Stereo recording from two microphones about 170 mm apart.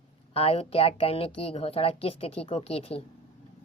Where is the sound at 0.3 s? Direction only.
35° left (ahead or behind).